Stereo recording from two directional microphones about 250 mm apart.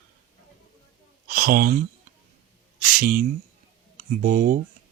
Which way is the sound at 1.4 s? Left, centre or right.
Right.